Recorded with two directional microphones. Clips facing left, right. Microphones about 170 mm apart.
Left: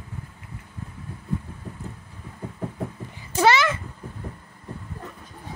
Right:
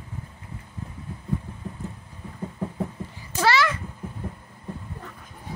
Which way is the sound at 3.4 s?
20° left (ahead or behind).